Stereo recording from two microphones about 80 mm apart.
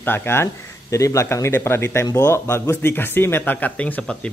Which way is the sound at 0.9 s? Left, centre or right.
Left.